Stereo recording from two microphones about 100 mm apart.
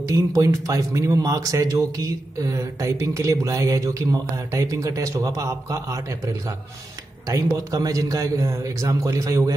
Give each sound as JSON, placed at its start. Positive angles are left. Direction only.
{"t": 0.0, "sound": "speech", "side_deg": -35}